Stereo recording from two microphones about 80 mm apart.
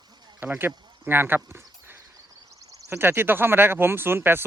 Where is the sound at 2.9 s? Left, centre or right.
Right.